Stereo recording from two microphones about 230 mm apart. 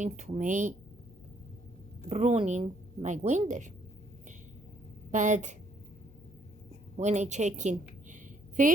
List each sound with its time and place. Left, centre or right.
0.0 s a woman's voice: right
2.0 s a woman's voice: right
5.1 s a woman's voice: right
6.9 s a woman's voice: right